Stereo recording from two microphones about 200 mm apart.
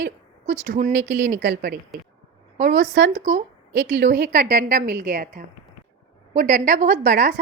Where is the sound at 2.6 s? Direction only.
40° right (ahead or behind).